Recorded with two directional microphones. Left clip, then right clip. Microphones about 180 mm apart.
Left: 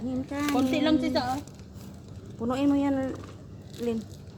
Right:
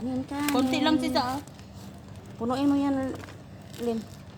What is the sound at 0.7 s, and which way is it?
Speech, 30° right (ahead or behind).